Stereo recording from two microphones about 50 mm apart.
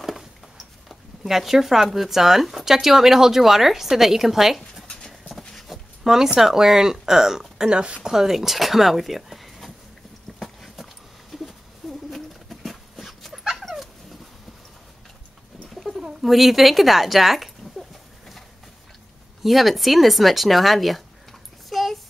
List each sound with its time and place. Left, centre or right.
0.0 s speech: centre
5.4 s dog: centre
6.0 s speech: centre
8.1 s speech: centre
11.3 s a sound: centre
12.1 s dog: centre
15.7 s bird: centre
16.0 s a sound: centre
19.4 s speech: centre